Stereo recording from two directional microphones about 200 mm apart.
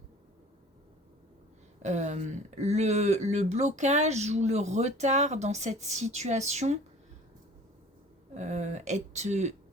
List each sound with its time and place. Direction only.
1.8 s speech: 35° right (ahead or behind)
8.3 s speech: 35° right (ahead or behind)